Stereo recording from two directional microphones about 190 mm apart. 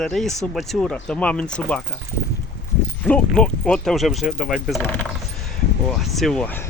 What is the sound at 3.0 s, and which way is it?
Speech, 5° left (ahead or behind).